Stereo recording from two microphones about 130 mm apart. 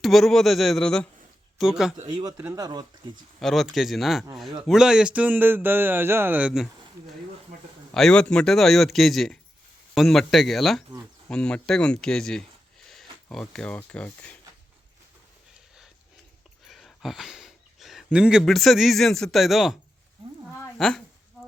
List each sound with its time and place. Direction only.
0.0 s a man's voice: centre (ahead or behind)
2.0 s speech: 30° right (ahead or behind)
3.4 s a man's voice: centre (ahead or behind)
7.9 s a man's voice: 5° left (ahead or behind)
16.6 s speech: centre (ahead or behind)
20.7 s speech: 5° left (ahead or behind)